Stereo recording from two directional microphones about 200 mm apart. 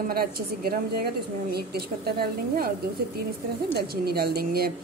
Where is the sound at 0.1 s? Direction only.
50° right (ahead or behind).